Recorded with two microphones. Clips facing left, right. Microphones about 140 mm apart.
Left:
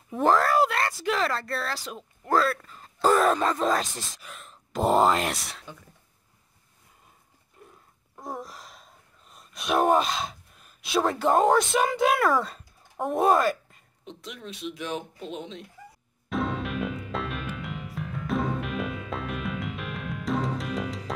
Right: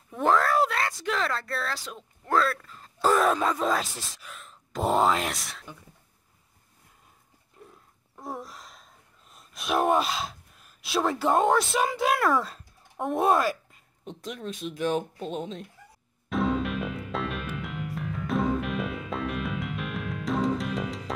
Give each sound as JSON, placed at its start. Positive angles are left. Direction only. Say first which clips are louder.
{"t": 0.1, "sound": "speech", "louder": "left 2 dB", "side_deg": 0}
{"t": 8.2, "sound": "a sound", "louder": "left 1 dB", "side_deg": 0}
{"t": 9.3, "sound": "speech", "louder": "left 2 dB", "side_deg": 0}
{"t": 14.0, "sound": "speech", "louder": "right 4 dB", "side_deg": -45}
{"t": 16.3, "sound": "music", "louder": "right 3 dB", "side_deg": 0}